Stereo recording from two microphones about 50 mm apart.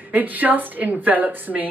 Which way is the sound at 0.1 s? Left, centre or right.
Right.